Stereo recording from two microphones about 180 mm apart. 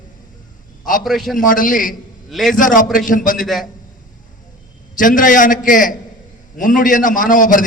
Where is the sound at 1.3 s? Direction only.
50° left (ahead or behind).